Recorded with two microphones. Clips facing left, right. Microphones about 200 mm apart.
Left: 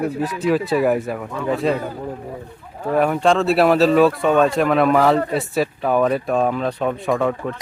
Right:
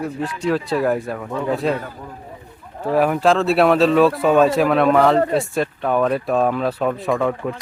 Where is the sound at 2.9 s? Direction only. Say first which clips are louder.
Even; 5° right (ahead or behind).